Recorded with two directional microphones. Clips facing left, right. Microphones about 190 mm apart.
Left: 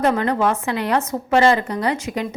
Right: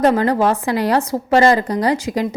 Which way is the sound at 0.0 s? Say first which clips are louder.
Right 4 dB; 35° right (ahead or behind).